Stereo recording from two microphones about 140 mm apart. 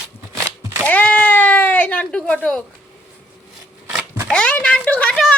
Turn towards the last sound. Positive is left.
turn(degrees=5)  # may be behind; listen again after turning